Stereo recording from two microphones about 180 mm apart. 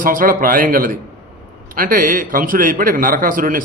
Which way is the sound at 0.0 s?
50° right (ahead or behind).